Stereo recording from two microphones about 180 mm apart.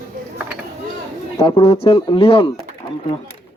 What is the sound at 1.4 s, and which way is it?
Speech, 30° left (ahead or behind).